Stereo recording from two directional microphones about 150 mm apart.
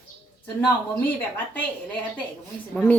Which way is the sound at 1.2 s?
10° left (ahead or behind).